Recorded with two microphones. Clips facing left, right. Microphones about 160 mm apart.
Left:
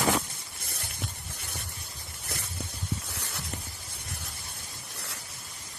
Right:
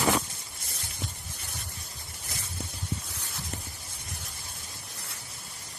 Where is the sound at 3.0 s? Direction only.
70° left (ahead or behind).